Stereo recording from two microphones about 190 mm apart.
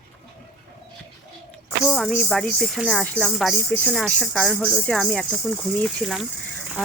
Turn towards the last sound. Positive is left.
turn(degrees=0)  # may be behind; listen again after turning